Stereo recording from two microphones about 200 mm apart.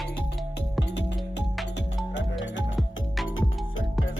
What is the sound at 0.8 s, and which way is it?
Music, 60° left (ahead or behind).